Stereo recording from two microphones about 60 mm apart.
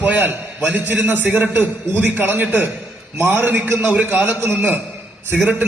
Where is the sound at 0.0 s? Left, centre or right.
Right.